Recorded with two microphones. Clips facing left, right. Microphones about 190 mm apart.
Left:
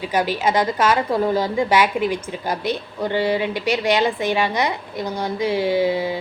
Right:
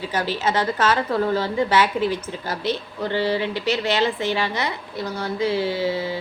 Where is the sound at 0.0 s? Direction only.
15° left (ahead or behind).